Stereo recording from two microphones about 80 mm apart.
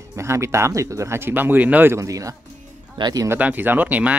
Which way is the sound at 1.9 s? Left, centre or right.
Right.